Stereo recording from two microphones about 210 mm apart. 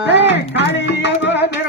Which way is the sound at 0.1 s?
55° left (ahead or behind).